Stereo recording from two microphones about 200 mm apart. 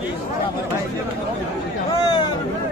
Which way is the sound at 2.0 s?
20° left (ahead or behind).